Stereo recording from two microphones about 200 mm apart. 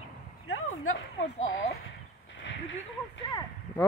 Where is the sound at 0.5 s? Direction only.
85° left.